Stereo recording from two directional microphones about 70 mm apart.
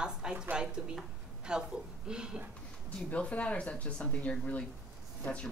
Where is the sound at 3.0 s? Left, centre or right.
Centre.